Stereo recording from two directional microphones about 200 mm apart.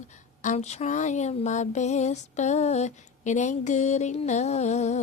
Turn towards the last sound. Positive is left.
turn(degrees=35)  # may be behind; listen again after turning